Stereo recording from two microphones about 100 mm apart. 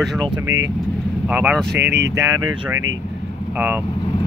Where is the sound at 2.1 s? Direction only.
30° right (ahead or behind).